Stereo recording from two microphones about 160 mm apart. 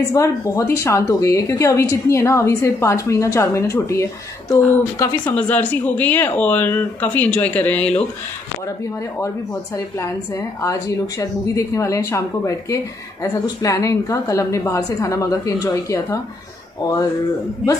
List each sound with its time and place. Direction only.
0.1 s a woman's voice: 20° left (ahead or behind)
5.3 s speech: 10° left (ahead or behind)
9.8 s a woman's voice: 20° left (ahead or behind)